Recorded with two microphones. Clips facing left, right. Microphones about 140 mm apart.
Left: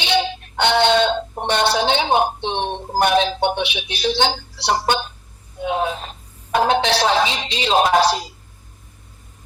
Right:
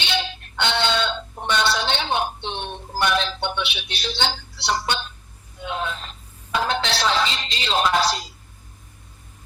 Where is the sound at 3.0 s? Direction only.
50° left (ahead or behind).